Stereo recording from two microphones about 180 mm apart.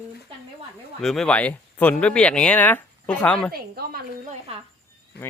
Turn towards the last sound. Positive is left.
turn(degrees=60)  # may be behind; listen again after turning